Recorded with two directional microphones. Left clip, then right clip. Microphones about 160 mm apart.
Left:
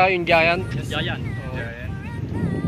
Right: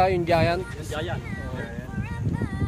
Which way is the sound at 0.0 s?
15° left (ahead or behind).